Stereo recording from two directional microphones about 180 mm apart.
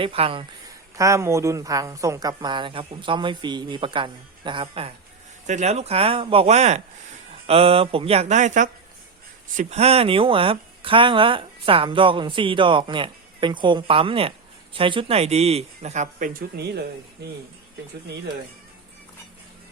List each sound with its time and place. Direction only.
0.0 s speech: 30° right (ahead or behind)
0.9 s speech: 15° right (ahead or behind); by 16.8 s 65° right (ahead or behind)